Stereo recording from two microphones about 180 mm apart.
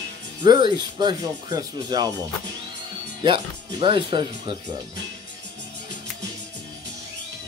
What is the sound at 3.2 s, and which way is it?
Speech, 25° right (ahead or behind).